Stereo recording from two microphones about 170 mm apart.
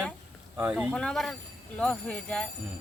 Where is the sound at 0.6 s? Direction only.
10° right (ahead or behind).